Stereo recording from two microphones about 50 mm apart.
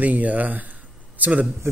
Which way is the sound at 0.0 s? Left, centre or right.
Right.